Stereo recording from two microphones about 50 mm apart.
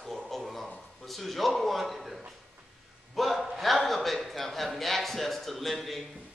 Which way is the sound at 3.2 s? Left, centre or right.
Centre.